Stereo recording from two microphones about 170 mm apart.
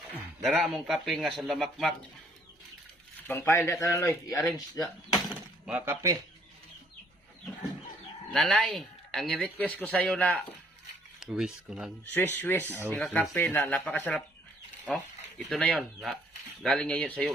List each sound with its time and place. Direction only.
0.4 s speech: centre (ahead or behind)
3.2 s speech: 15° left (ahead or behind)
5.3 s speech: 5° right (ahead or behind)
8.3 s speech: 5° left (ahead or behind)
11.2 s speech: 5° right (ahead or behind)
12.0 s speech: 10° left (ahead or behind)